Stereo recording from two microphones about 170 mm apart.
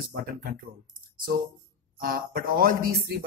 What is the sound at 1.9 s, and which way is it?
Speech, 60° right (ahead or behind).